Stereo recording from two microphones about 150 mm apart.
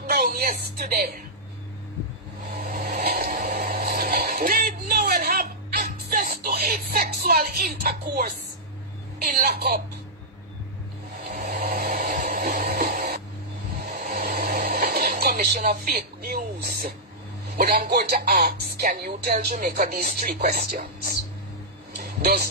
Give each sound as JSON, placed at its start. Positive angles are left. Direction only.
{"t": 0.0, "sound": "speech", "side_deg": -85}
{"t": 2.5, "sound": "a sound", "side_deg": -90}
{"t": 9.2, "sound": "speech", "side_deg": -90}
{"t": 11.2, "sound": "vehicle", "side_deg": -90}
{"t": 13.8, "sound": "music", "side_deg": -75}
{"t": 17.6, "sound": "speech", "side_deg": -90}
{"t": 21.9, "sound": "music", "side_deg": -90}